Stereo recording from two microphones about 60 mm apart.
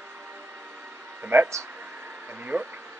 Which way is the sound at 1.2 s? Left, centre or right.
Right.